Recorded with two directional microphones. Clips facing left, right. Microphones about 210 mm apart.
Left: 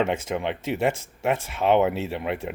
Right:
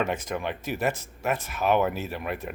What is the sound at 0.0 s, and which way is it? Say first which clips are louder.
Speech: left 4 dB; 25° left (ahead or behind).